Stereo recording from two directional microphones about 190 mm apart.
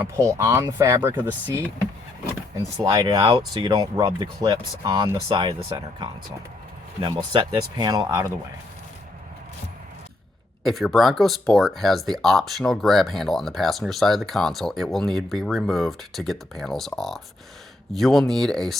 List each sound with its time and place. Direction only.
0.0 s speech: 15° right (ahead or behind)
2.6 s speech: 20° right (ahead or behind)
10.6 s speech: centre (ahead or behind)